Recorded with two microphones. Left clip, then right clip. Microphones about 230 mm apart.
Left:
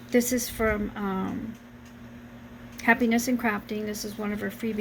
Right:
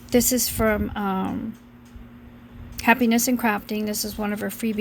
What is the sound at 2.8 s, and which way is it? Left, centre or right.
A woman's voice, right.